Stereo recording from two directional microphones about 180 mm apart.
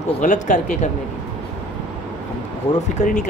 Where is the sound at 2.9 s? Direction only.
45° left (ahead or behind).